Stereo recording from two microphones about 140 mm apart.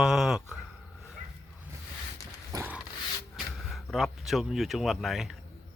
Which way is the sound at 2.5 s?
15° right (ahead or behind).